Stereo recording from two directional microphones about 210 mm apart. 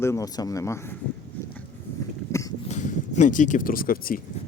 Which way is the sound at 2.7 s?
35° left (ahead or behind).